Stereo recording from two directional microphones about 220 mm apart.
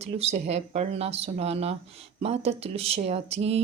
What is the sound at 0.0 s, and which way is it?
Speech, 30° right (ahead or behind).